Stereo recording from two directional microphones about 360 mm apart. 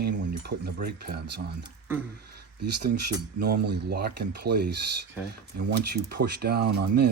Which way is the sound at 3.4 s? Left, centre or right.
Right.